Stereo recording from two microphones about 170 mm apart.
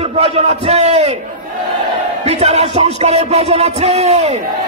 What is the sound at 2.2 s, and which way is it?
Music, 40° right (ahead or behind).